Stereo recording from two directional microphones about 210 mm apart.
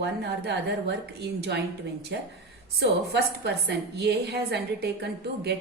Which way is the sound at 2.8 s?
50° right (ahead or behind).